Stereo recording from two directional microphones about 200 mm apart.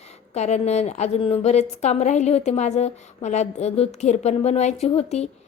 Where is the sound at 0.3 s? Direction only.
35° left (ahead or behind).